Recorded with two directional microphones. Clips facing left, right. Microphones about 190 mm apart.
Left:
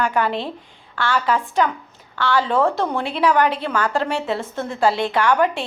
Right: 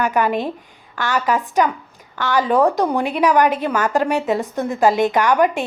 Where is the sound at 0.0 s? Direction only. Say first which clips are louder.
Right 3 dB; 15° right (ahead or behind).